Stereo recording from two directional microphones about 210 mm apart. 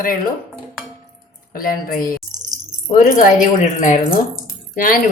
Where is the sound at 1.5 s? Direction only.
45° left (ahead or behind).